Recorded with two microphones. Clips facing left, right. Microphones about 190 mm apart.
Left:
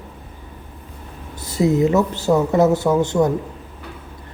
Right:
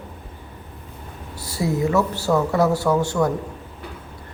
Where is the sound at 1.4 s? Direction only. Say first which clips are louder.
Left 6 dB; 20° left (ahead or behind).